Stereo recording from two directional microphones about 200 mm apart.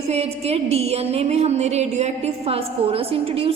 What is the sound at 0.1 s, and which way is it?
A woman's voice, 30° right (ahead or behind).